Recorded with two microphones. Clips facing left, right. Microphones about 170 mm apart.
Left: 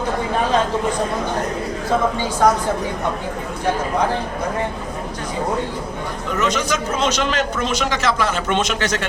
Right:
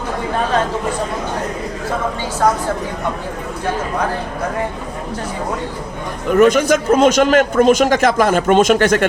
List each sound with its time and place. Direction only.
6.3 s a man's voice: 55° right (ahead or behind)